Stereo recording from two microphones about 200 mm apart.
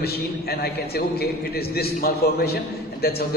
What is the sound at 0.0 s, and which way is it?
A man's voice, 50° left (ahead or behind).